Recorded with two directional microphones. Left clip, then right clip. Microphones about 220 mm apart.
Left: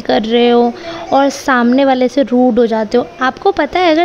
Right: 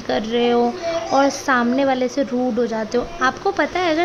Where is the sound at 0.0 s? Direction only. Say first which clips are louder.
Left 8 dB; 35° left (ahead or behind).